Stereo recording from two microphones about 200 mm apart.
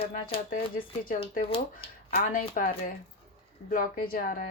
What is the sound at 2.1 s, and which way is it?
Speech, 45° left (ahead or behind).